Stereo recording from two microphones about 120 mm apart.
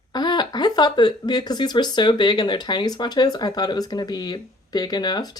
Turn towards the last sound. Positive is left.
turn(degrees=35)  # may be behind; listen again after turning